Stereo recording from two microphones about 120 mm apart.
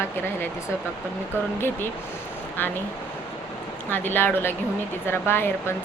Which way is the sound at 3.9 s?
15° left (ahead or behind).